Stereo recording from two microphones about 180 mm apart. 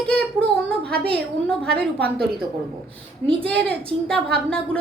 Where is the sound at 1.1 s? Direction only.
5° left (ahead or behind).